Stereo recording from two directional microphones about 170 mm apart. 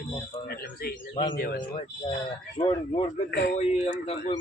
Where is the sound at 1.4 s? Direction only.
65° left (ahead or behind).